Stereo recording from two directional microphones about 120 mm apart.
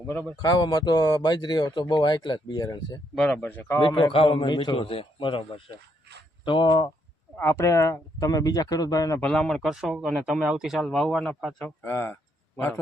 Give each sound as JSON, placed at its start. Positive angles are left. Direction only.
{"t": 0.1, "sound": "speech", "side_deg": 15}
{"t": 0.4, "sound": "speech", "side_deg": 35}
{"t": 3.2, "sound": "speech", "side_deg": 5}
{"t": 3.8, "sound": "a man's voice", "side_deg": 45}
{"t": 7.3, "sound": "speech", "side_deg": 20}
{"t": 9.2, "sound": "speech", "side_deg": 5}
{"t": 11.9, "sound": "speech", "side_deg": 20}